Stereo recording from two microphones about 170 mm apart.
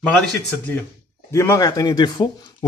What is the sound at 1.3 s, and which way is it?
Speech, 15° left (ahead or behind).